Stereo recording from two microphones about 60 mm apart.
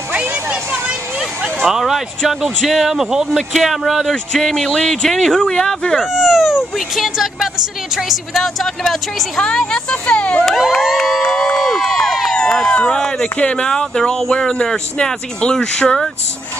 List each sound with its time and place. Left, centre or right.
1.6 s speech: centre
5.9 s speech: centre
9.7 s speech: centre
10.4 s speech: centre
10.7 s a sound: centre
11.2 s run: centre
12.4 s speech: centre